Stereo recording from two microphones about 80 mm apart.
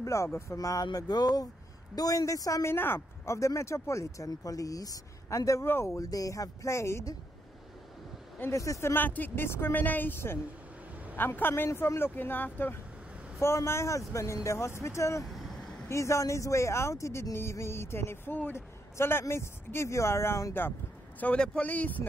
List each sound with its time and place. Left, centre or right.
0.0 s speech: left
0.9 s a sound: left
2.0 s speech: left
2.6 s speech: left
8.4 s speech: left
8.9 s speech: left
13.4 s speech: left
15.2 s vehicle: centre
15.9 s speech: left
21.2 s speech: centre